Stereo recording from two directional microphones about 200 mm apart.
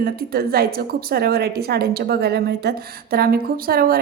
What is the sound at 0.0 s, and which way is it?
A woman's voice, 50° right (ahead or behind).